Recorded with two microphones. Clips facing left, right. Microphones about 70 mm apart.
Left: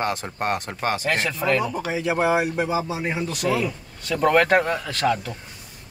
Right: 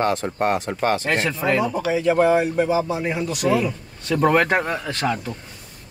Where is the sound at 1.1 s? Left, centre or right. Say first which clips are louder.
Right 1 dB; centre.